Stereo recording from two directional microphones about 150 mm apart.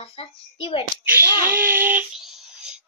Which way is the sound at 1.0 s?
15° right (ahead or behind).